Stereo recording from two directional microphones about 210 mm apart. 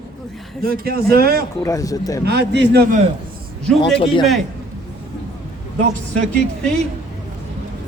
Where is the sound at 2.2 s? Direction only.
50° right (ahead or behind).